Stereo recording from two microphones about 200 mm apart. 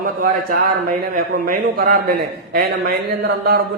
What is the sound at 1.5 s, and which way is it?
A man's voice, 45° right (ahead or behind).